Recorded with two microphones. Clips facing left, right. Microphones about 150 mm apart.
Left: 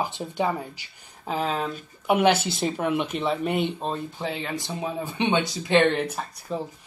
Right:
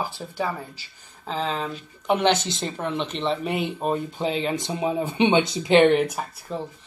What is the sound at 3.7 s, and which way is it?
Speech, 15° right (ahead or behind).